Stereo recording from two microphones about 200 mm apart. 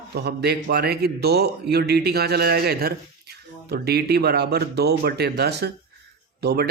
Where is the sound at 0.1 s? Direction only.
55° right (ahead or behind).